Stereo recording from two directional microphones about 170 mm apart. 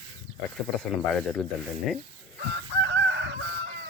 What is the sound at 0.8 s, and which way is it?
Speech, 5° left (ahead or behind).